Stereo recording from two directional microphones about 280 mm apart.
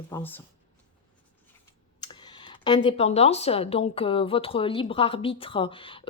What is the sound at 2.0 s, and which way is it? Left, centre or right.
A woman's voice, centre.